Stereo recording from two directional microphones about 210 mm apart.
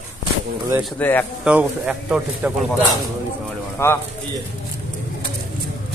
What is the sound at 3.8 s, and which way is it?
Speech, 10° left (ahead or behind).